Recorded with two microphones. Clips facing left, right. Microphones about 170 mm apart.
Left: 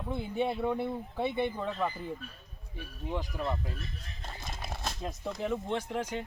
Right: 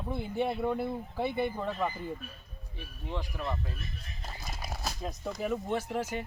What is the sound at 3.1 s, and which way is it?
Speech, 15° left (ahead or behind).